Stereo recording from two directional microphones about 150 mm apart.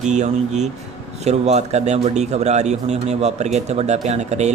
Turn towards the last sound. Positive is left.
turn(degrees=-50)  # may be behind; listen again after turning